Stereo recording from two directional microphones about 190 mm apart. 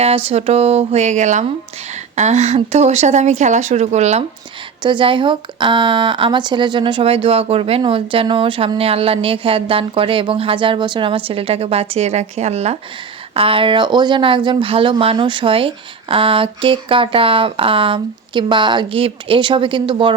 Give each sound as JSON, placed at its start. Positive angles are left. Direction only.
{"t": 0.0, "sound": "speech", "side_deg": -30}
{"t": 4.8, "sound": "speech", "side_deg": -25}